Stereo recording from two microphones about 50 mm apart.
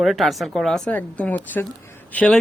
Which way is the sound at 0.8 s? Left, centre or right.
Left.